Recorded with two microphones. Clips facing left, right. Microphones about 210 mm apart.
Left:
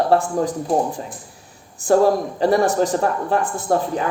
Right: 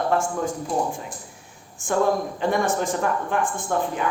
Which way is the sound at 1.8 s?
35° left (ahead or behind).